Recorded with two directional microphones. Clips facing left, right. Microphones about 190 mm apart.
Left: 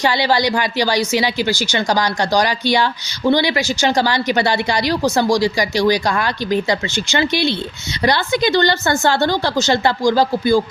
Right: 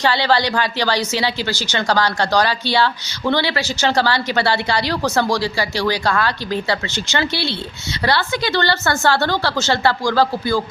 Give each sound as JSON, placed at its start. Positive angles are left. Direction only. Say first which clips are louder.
{"t": 0.0, "sound": "a woman's voice", "louder": "left 1 dB", "side_deg": 15}